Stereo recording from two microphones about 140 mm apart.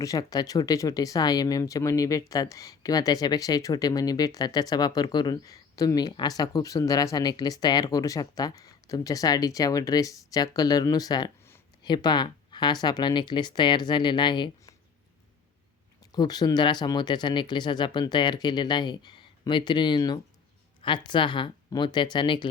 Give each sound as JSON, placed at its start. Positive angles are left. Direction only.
{"t": 0.0, "sound": "speech", "side_deg": 25}
{"t": 16.1, "sound": "speech", "side_deg": 30}